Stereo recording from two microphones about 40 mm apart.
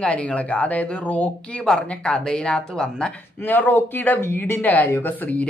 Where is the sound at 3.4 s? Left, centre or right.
Left.